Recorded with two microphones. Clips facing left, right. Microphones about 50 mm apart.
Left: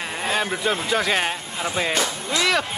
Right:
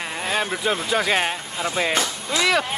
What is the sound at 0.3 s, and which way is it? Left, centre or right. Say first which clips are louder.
Speech: even; centre.